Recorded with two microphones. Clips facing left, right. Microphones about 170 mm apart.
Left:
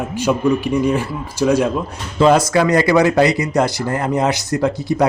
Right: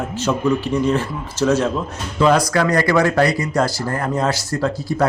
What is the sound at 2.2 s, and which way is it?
Speech, 25° left (ahead or behind).